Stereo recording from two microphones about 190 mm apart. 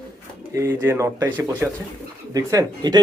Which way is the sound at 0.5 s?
15° right (ahead or behind).